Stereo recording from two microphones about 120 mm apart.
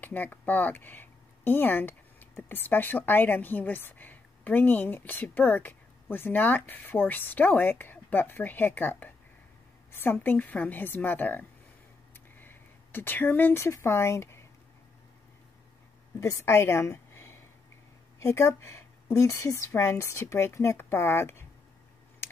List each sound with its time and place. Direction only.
0.0 s a woman's voice: 15° left (ahead or behind)
16.2 s a woman's voice: 20° left (ahead or behind)